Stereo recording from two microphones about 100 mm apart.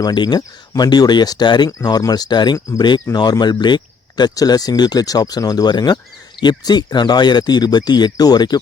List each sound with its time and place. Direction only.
0.0 s speech: 45° left (ahead or behind)